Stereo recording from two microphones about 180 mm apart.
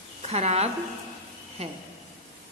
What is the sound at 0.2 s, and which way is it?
Speech, 35° right (ahead or behind).